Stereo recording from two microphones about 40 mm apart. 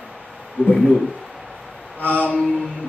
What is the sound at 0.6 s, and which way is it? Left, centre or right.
Speech, left.